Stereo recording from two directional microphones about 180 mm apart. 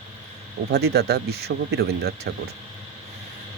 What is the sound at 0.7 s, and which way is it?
Speech, 65° right (ahead or behind).